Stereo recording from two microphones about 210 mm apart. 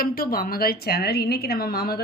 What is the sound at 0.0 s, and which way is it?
A woman's voice, 45° left (ahead or behind).